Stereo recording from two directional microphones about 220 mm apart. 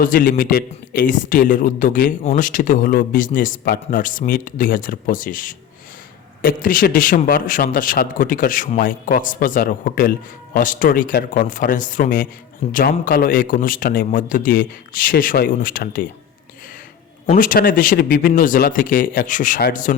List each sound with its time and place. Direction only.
0.0 s a man's voice: 40° left (ahead or behind)
17.2 s a man's voice: 35° left (ahead or behind)